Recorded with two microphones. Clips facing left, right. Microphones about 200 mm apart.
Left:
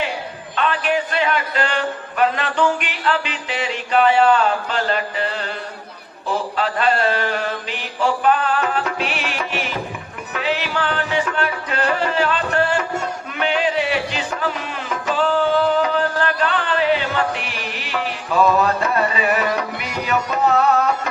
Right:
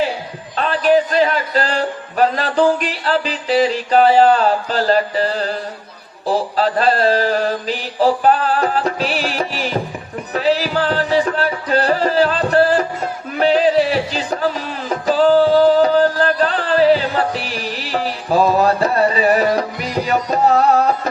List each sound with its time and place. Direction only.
0.5 s a man's voice: 35° right (ahead or behind)
10.3 s music: 35° right (ahead or behind)